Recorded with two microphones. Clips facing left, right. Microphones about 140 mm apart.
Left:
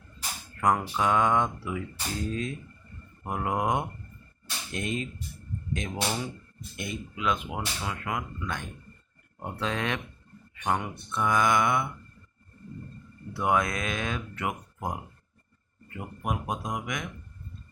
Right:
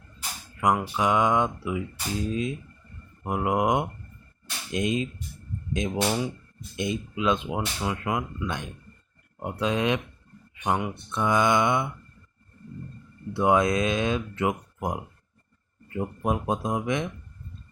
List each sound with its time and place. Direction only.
0.5 s speech: 10° right (ahead or behind)
13.3 s speech: 25° right (ahead or behind)